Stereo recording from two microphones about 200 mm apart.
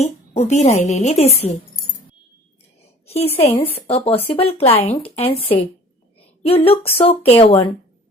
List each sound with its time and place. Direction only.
0.0 s speech: 35° left (ahead or behind)
3.1 s a woman's voice: 30° left (ahead or behind)